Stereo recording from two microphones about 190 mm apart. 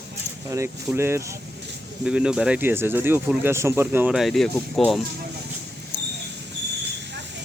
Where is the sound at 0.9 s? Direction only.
15° right (ahead or behind).